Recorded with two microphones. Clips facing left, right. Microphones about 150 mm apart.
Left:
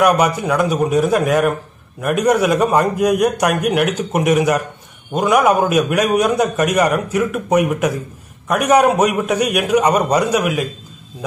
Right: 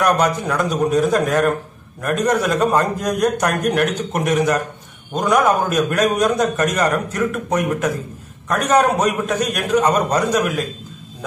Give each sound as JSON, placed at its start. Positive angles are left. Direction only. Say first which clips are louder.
{"t": 0.0, "sound": "a man's voice", "louder": "left 3 dB", "side_deg": 10}